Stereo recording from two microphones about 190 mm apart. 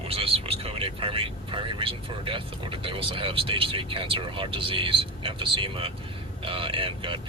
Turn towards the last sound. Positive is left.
turn(degrees=-30)  # may be behind; listen again after turning